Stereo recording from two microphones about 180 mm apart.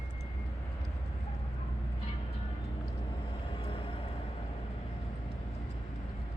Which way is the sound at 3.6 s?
30° left (ahead or behind).